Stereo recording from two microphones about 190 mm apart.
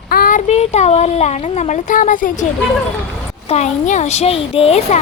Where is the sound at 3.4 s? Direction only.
35° left (ahead or behind).